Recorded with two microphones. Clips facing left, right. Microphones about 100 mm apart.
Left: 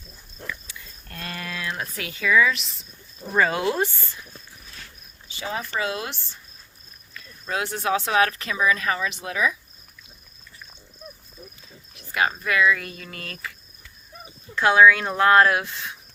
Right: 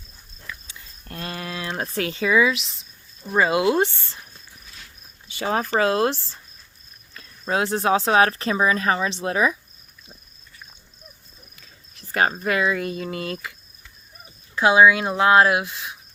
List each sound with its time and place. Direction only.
0.7 s a sound: 25° right (ahead or behind)
2.5 s speech: centre (ahead or behind)
3.3 s speech: 15° right (ahead or behind)
5.3 s speech: 60° right (ahead or behind)
5.7 s speech: 35° right (ahead or behind)
12.1 s speech: 40° right (ahead or behind); by 13.5 s 20° right (ahead or behind)
14.5 s speech: 15° right (ahead or behind)